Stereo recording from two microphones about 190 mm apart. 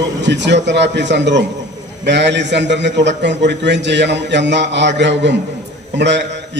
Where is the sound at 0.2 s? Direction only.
65° right (ahead or behind).